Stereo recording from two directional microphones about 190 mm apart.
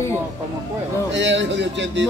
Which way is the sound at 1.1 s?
70° right (ahead or behind).